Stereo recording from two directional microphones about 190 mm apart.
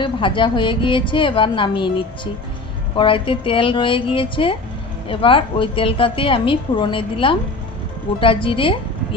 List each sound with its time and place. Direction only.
0.0 s a woman's voice: 25° left (ahead or behind)
3.0 s a woman's voice: 25° left (ahead or behind)